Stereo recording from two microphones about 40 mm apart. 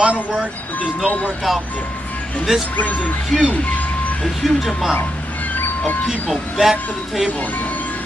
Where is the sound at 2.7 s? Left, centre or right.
Left.